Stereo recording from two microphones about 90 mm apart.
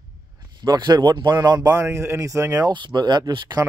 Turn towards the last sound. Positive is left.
turn(degrees=-55)  # may be behind; listen again after turning